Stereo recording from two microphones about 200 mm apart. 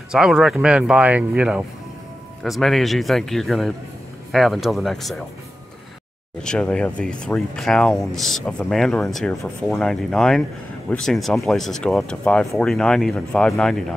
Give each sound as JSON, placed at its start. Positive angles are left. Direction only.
{"t": 0.1, "sound": "speech", "side_deg": -5}
{"t": 6.4, "sound": "speech", "side_deg": 5}